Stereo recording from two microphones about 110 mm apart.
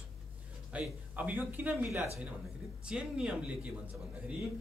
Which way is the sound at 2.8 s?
5° right (ahead or behind).